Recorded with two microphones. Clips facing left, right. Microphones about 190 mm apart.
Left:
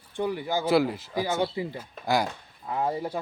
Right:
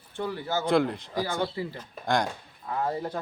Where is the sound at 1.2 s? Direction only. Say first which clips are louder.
Left 4 dB; 20° left (ahead or behind).